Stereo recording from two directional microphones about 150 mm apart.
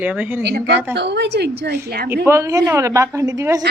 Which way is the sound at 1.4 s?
90° right.